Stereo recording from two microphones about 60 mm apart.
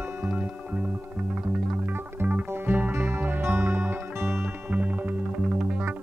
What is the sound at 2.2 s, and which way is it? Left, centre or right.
Music, right.